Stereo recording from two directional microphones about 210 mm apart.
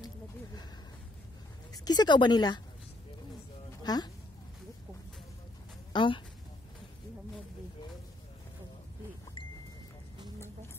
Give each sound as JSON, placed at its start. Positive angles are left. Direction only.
{"t": 1.7, "sound": "speech", "side_deg": 20}
{"t": 3.8, "sound": "speech", "side_deg": 20}
{"t": 5.9, "sound": "speech", "side_deg": 20}